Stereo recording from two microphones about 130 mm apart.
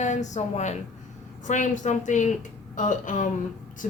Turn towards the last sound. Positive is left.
turn(degrees=75)  # may be behind; listen again after turning